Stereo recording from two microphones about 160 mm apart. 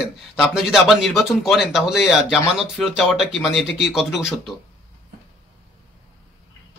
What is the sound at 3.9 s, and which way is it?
Speech, centre (ahead or behind).